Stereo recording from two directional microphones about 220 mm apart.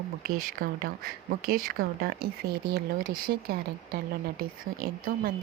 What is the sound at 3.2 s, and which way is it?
A woman's voice, 45° right (ahead or behind).